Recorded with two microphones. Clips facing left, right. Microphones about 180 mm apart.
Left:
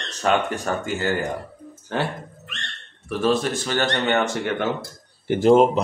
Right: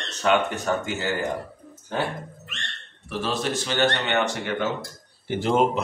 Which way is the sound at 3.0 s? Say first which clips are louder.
Left 6 dB; 50° left (ahead or behind).